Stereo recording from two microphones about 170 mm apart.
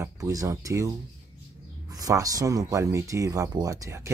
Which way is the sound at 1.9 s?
20° right (ahead or behind).